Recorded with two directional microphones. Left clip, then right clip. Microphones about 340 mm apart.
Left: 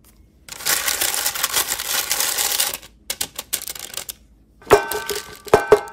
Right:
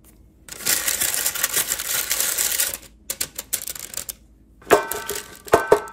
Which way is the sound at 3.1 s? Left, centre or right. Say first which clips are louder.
Left 3 dB; centre.